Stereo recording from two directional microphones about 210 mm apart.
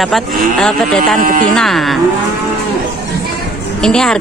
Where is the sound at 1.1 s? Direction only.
40° right (ahead or behind).